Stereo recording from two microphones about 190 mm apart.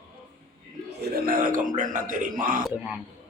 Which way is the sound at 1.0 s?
50° right (ahead or behind).